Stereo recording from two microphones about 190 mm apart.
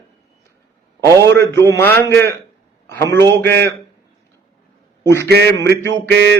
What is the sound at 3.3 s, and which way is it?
Mantra, 60° right (ahead or behind).